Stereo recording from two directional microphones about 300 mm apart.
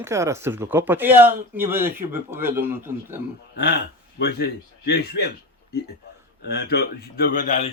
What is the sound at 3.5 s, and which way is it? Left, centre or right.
Speech, left.